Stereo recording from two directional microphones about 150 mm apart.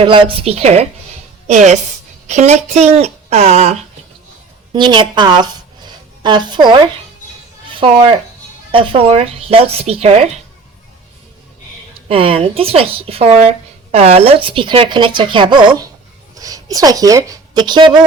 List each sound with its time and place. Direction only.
0.0 s a woman's voice: 35° right (ahead or behind)
4.7 s a woman's voice: 30° right (ahead or behind)
12.0 s a woman's voice: 40° right (ahead or behind)